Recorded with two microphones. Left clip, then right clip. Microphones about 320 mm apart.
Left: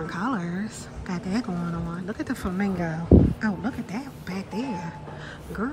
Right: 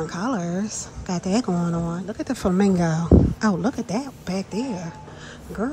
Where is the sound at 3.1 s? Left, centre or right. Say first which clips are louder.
Even; centre.